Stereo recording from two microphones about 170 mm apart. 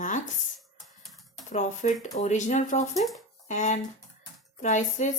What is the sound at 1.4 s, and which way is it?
Speech, 45° left (ahead or behind).